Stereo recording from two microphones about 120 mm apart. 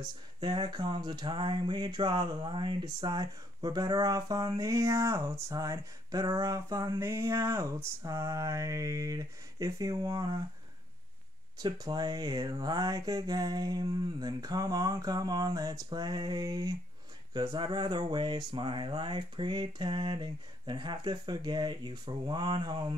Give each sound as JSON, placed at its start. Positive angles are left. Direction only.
{"t": 0.0, "sound": "speech", "side_deg": -40}
{"t": 7.0, "sound": "a sound", "side_deg": -20}
{"t": 11.5, "sound": "speech", "side_deg": -35}